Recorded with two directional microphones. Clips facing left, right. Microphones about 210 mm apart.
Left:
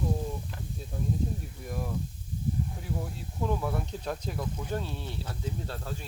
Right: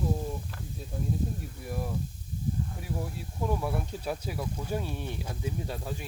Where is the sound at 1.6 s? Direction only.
10° right (ahead or behind).